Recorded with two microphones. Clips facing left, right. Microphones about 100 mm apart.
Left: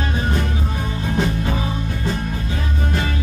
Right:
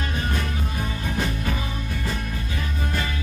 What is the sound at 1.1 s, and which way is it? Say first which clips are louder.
Music: left 7 dB; 25° left (ahead or behind).